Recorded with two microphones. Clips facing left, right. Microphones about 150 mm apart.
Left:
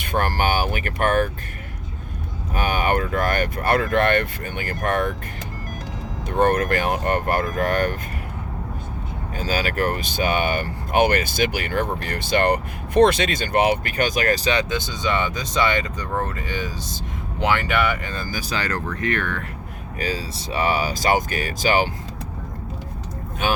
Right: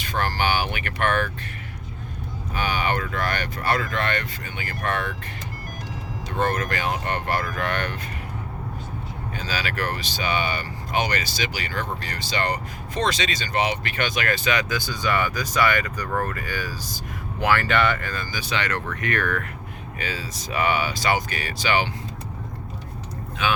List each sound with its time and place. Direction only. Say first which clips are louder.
0.0 s speech: left 3 dB; 55° left (ahead or behind)
2.6 s speech: left 4 dB; 50° left (ahead or behind)
6.2 s speech: left 6 dB; 55° left (ahead or behind)
9.4 s speech: left 6 dB; 45° left (ahead or behind); by 18.1 s 10° left (ahead or behind)
18.3 s speech: left 1 dB; 40° left (ahead or behind)